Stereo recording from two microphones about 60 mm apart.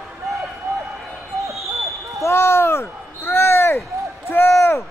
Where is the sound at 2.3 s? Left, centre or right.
Left.